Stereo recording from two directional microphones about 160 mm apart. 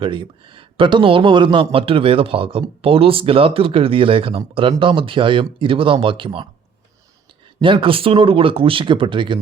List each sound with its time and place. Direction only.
0.0 s speech: 30° right (ahead or behind)
7.6 s speech: 30° right (ahead or behind)